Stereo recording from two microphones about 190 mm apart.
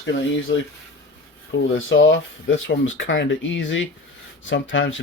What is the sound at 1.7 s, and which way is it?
Speech, 90° left.